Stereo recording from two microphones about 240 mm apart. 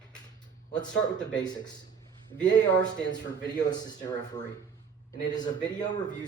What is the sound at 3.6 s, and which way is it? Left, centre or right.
A man's voice, centre.